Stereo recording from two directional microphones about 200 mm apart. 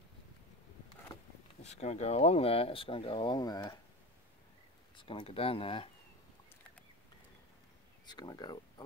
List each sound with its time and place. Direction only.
1.6 s speech: 35° left (ahead or behind)
4.9 s speech: 25° left (ahead or behind)
8.1 s speech: 20° left (ahead or behind)